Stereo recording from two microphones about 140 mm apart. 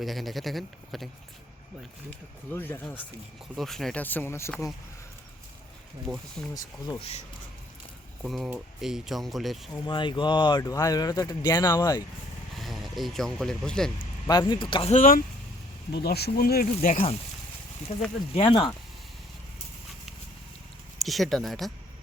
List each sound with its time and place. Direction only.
0.0 s speech: centre (ahead or behind)
2.5 s speech: 15° left (ahead or behind)
3.5 s speech: centre (ahead or behind)
4.0 s speech: 15° left (ahead or behind)
6.1 s speech: 5° left (ahead or behind)
6.5 s speech: 25° left (ahead or behind)
7.0 s speech: 45° left (ahead or behind)
8.2 s speech: 5° right (ahead or behind)
9.7 s speech: 35° left (ahead or behind)
12.5 s speech: centre (ahead or behind)
14.3 s speech: 30° left (ahead or behind)
14.9 s speech: 85° left
17.9 s speech: 45° left (ahead or behind)
21.0 s speech: centre (ahead or behind)